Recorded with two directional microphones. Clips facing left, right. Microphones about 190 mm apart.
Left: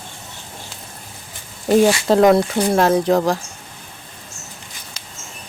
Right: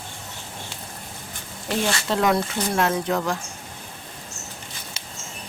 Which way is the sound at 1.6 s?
45° left (ahead or behind).